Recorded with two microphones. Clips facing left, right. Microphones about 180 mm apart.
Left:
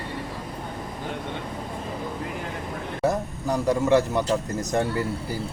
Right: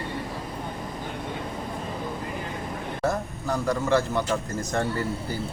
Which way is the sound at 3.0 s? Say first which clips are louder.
Left 3 dB; 15° left (ahead or behind).